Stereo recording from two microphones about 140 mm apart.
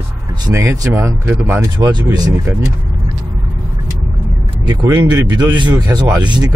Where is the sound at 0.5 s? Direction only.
20° right (ahead or behind).